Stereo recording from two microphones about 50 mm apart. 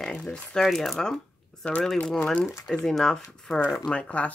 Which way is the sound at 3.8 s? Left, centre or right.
Left.